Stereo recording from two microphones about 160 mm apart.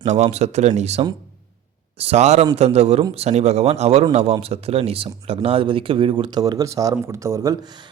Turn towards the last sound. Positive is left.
turn(degrees=-25)  # may be behind; listen again after turning